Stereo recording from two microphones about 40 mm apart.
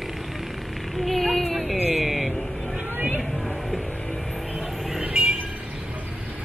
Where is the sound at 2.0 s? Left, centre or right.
Centre.